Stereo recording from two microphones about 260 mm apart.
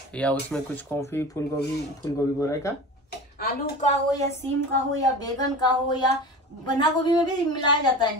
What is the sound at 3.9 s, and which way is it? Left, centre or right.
A woman's voice, centre.